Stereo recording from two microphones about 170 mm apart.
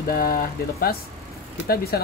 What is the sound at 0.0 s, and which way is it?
Speech, 60° left (ahead or behind).